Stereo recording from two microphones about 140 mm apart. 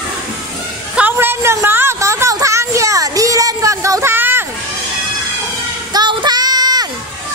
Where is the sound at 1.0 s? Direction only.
15° right (ahead or behind).